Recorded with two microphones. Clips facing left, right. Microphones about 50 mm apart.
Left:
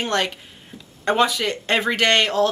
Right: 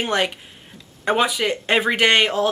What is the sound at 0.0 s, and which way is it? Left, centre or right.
Speech, centre.